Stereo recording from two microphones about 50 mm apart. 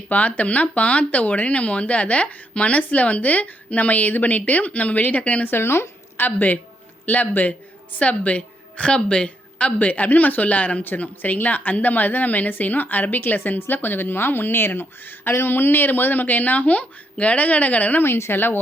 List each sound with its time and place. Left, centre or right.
0.1 s speech: left
5.5 s speech: left
6.1 s a woman's voice: left
8.9 s a woman's voice: centre
18.0 s speech: left